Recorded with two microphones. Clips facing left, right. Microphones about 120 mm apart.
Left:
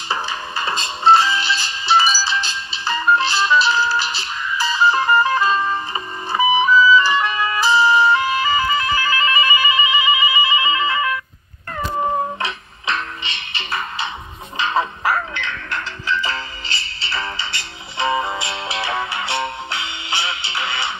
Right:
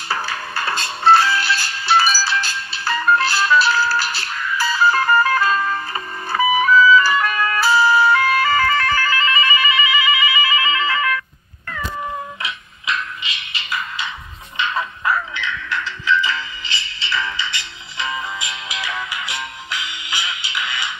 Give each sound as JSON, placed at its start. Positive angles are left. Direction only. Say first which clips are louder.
{"t": 0.1, "sound": "music", "louder": "even", "side_deg": 0}
{"t": 7.6, "sound": "music", "louder": "even", "side_deg": -5}
{"t": 8.1, "sound": "music", "louder": "right 1 dB", "side_deg": 20}
{"t": 11.7, "sound": "cat", "louder": "left 6 dB", "side_deg": 40}
{"t": 14.6, "sound": "music", "louder": "left 3 dB", "side_deg": 30}
{"t": 15.1, "sound": "music", "louder": "even", "side_deg": 50}
{"t": 17.9, "sound": "music", "louder": "left 6 dB", "side_deg": 25}